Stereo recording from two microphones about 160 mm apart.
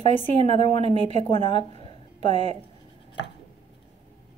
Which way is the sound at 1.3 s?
30° left (ahead or behind).